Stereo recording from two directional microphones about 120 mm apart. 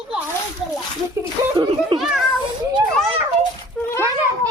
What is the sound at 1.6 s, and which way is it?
Speech, 40° right (ahead or behind).